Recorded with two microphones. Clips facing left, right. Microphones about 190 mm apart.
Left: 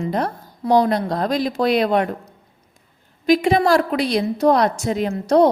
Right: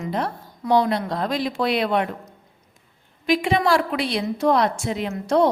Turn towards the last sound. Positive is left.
turn(degrees=40)  # may be behind; listen again after turning